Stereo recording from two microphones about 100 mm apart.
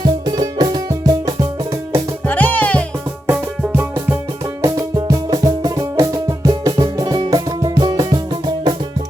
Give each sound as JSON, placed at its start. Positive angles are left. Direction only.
{"t": 0.0, "sound": "music", "side_deg": -50}
{"t": 2.2, "sound": "music", "side_deg": 20}
{"t": 4.6, "sound": "music", "side_deg": -40}